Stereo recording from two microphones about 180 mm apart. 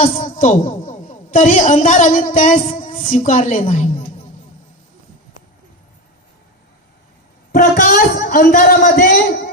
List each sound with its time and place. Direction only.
0.0 s a woman's voice: 45° left (ahead or behind)
7.5 s a man's voice: 50° left (ahead or behind)